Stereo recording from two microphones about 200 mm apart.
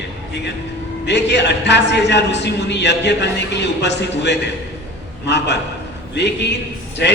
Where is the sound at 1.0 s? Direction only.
60° left (ahead or behind).